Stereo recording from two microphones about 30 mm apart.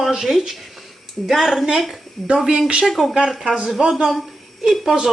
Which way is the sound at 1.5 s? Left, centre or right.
Right.